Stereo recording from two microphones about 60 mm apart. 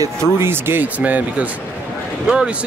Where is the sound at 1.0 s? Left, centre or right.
Right.